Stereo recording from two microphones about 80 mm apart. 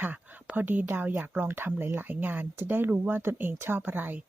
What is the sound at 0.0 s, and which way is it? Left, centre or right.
Speech, right.